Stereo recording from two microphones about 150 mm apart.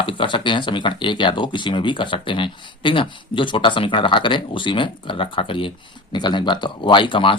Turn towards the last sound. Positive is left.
turn(degrees=35)  # may be behind; listen again after turning